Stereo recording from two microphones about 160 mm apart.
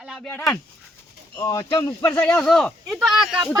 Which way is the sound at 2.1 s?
5° left (ahead or behind).